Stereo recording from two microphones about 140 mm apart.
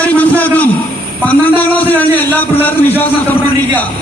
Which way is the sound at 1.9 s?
15° left (ahead or behind).